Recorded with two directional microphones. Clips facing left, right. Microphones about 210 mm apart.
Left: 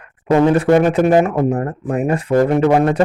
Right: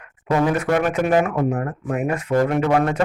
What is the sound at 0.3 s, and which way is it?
Speech, 25° left (ahead or behind).